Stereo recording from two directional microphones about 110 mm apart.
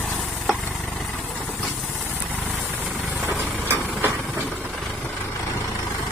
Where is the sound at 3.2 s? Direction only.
20° right (ahead or behind).